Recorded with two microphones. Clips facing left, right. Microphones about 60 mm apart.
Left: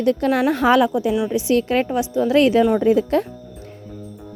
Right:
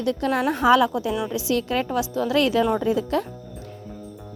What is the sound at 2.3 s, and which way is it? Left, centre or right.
A woman's voice, left.